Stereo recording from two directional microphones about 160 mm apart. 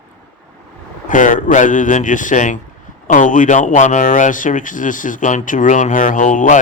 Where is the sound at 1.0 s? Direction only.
55° left (ahead or behind).